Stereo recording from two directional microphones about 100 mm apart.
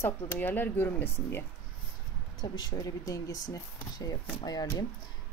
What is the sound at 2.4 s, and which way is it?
Speech, 45° left (ahead or behind).